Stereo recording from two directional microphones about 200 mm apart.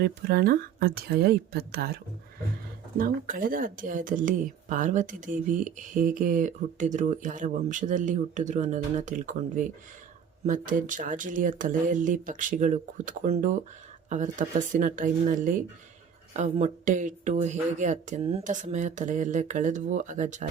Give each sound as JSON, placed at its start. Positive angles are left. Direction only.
{"t": 0.0, "sound": "speech", "side_deg": -50}
{"t": 3.0, "sound": "speech", "side_deg": -45}